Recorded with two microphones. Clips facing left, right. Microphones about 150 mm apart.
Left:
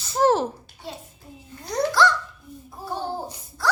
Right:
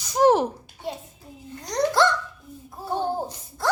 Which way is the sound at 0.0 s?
15° right (ahead or behind).